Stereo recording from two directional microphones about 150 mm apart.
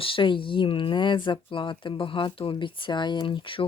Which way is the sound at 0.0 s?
35° left (ahead or behind).